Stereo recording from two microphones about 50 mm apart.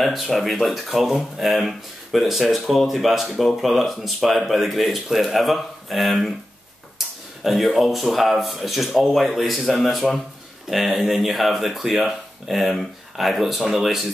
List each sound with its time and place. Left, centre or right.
0.0 s speech: centre
7.4 s speech: centre